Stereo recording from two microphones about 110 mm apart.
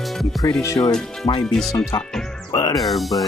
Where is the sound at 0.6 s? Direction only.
30° left (ahead or behind).